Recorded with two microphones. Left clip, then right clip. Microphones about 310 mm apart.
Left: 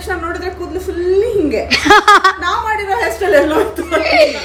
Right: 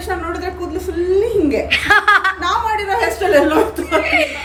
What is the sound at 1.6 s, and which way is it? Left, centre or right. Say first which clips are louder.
Speech: left 6 dB; centre.